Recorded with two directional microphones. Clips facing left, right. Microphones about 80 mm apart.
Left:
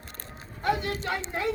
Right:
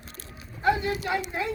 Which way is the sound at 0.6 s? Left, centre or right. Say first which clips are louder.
Right 3 dB; left.